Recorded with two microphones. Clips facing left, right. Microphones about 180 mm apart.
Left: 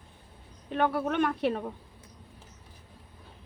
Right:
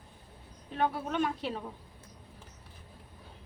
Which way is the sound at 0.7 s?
65° left (ahead or behind).